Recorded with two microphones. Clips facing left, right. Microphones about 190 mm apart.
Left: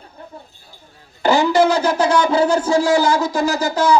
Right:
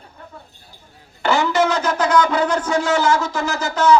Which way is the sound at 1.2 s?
35° left (ahead or behind).